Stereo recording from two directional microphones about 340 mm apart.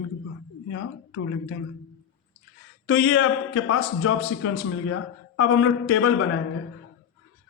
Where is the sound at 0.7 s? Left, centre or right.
Left.